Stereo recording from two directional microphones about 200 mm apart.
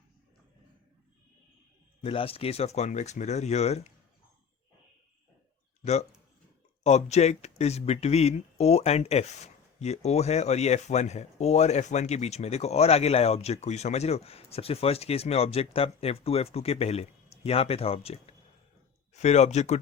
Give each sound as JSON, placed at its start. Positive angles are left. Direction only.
{"t": 2.0, "sound": "speech", "side_deg": 30}
{"t": 5.8, "sound": "speech", "side_deg": 35}